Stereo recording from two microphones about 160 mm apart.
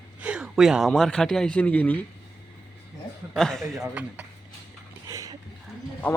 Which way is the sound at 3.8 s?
10° right (ahead or behind).